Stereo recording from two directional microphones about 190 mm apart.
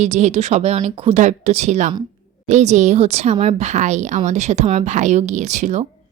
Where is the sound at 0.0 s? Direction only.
35° right (ahead or behind).